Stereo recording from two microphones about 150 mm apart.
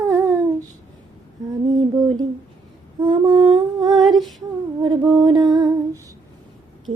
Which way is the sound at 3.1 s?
35° right (ahead or behind).